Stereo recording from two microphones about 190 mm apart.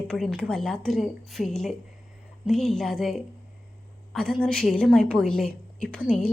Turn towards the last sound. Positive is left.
turn(degrees=5)  # may be behind; listen again after turning